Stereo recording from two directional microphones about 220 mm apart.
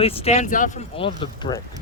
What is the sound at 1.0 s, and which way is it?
Speech, 25° left (ahead or behind).